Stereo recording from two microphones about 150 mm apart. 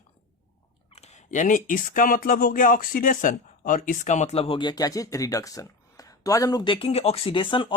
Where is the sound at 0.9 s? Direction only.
45° left (ahead or behind); by 6.7 s 25° left (ahead or behind).